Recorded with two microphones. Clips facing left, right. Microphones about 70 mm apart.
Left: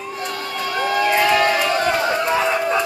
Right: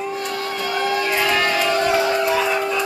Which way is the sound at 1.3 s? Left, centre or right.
Centre.